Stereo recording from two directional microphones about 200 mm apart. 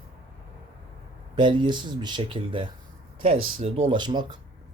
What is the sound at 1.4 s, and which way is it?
A man's voice, 25° right (ahead or behind).